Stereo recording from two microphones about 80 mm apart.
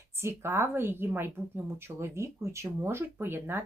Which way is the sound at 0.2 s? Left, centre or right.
Right.